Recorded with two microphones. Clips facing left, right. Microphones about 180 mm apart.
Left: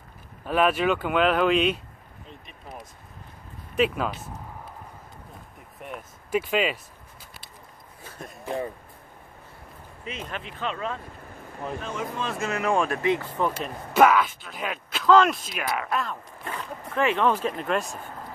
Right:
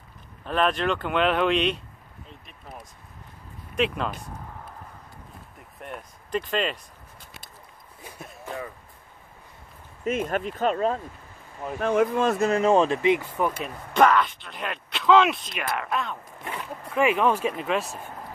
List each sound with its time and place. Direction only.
0.5 s speech: 5° left (ahead or behind)
5.8 s speech: centre (ahead or behind)
8.0 s a sound: 15° right (ahead or behind)
10.0 s speech: 45° right (ahead or behind)
11.8 s speech: 60° right (ahead or behind); by 13.3 s 20° right (ahead or behind)
13.9 s speech: 5° left (ahead or behind)
16.4 s speech: 10° right (ahead or behind)